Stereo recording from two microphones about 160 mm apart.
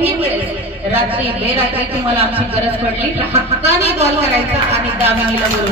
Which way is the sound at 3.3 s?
40° right (ahead or behind).